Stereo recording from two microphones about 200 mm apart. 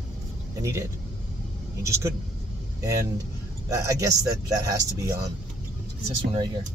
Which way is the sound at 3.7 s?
15° right (ahead or behind).